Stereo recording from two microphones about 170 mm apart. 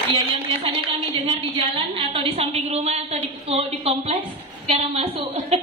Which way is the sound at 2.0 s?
35° right (ahead or behind).